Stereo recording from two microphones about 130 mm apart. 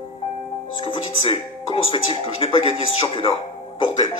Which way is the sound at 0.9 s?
45° left (ahead or behind).